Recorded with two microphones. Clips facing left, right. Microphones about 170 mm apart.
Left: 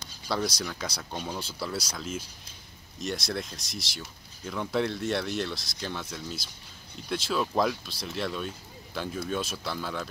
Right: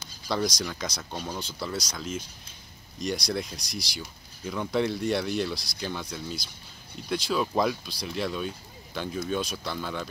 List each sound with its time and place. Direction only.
0.5 s speech: 5° left (ahead or behind)